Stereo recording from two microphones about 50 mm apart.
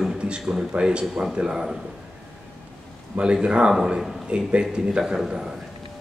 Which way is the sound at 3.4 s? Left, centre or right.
Centre.